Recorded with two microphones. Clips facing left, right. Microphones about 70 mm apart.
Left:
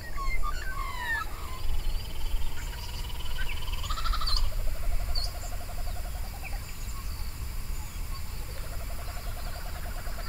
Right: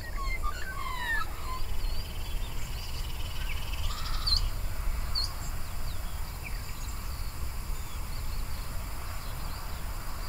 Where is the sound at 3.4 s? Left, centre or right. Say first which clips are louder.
Left 4 dB; left.